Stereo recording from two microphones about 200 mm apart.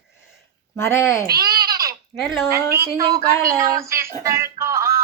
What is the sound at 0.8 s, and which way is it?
Speech, 15° left (ahead or behind).